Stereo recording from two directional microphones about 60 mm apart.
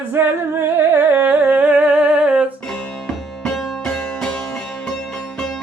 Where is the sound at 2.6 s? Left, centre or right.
Centre.